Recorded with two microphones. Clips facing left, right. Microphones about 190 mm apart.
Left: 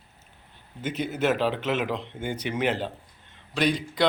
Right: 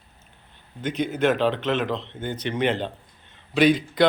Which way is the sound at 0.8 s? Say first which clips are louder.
Right 3 dB; 5° left (ahead or behind).